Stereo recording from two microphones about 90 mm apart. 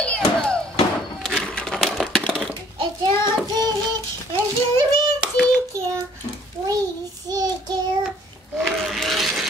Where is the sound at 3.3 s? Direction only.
50° right (ahead or behind).